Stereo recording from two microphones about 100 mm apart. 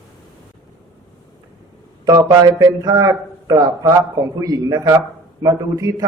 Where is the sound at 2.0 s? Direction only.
40° right (ahead or behind).